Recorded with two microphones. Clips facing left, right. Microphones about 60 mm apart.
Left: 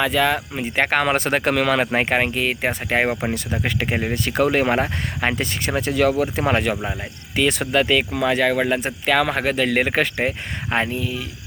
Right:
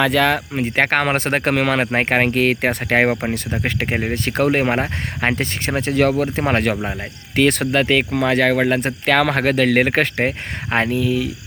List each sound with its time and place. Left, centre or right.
0.0 s speech: right
0.6 s speech: right
3.6 s speech: right
7.3 s speech: right
9.0 s speech: right